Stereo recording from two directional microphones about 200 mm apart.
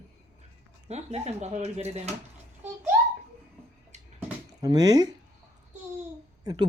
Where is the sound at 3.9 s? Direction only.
35° right (ahead or behind).